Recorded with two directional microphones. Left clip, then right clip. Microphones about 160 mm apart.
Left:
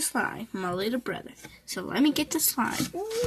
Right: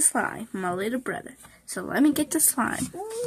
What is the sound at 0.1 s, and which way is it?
Speech, centre (ahead or behind).